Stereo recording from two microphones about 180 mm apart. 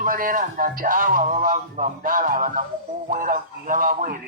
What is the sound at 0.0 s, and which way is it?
Speech, 50° right (ahead or behind).